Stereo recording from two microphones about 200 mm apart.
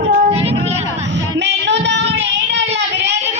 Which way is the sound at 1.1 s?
65° right (ahead or behind).